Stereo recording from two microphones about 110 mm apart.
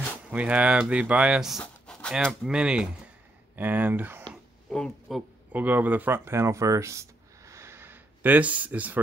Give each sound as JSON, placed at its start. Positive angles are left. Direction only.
{"t": 0.3, "sound": "speech", "side_deg": -10}
{"t": 1.6, "sound": "a sound", "side_deg": 10}
{"t": 2.4, "sound": "speech", "side_deg": -10}
{"t": 4.6, "sound": "speech", "side_deg": 5}
{"t": 5.5, "sound": "speech", "side_deg": -15}